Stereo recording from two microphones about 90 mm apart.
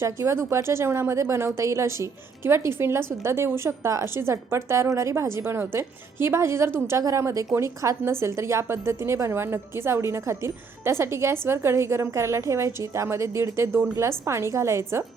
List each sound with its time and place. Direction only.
0.0 s a woman's voice: 30° right (ahead or behind)